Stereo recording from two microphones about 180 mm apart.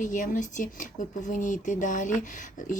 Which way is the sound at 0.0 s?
45° left (ahead or behind).